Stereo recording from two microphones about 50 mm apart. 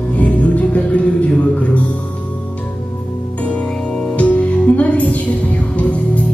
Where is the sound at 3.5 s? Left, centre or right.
Centre.